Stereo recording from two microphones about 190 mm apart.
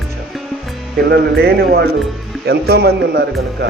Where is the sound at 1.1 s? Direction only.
55° right (ahead or behind).